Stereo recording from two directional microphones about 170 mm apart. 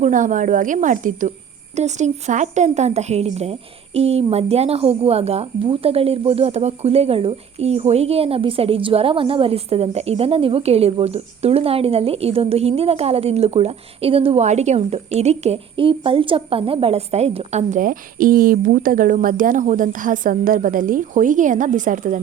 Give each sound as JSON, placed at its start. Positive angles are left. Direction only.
{"t": 0.0, "sound": "a woman's voice", "side_deg": -50}